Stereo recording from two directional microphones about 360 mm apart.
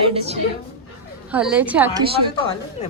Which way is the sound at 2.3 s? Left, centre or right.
Centre.